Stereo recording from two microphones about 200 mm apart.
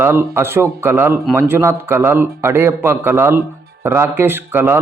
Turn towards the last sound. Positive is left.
turn(degrees=-10)  # may be behind; listen again after turning